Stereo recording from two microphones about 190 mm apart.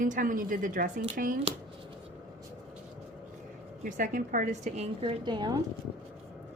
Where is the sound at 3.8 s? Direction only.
45° right (ahead or behind); by 5.6 s 20° right (ahead or behind).